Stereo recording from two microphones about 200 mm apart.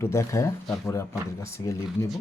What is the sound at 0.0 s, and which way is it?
Speech, 15° left (ahead or behind).